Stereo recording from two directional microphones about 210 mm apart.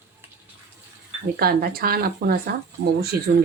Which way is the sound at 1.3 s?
45° right (ahead or behind).